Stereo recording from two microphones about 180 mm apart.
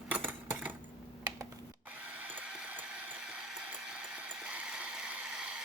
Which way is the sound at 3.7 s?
5° right (ahead or behind).